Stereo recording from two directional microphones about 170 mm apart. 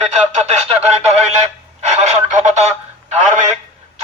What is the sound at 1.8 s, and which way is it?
Telephone, 45° right (ahead or behind).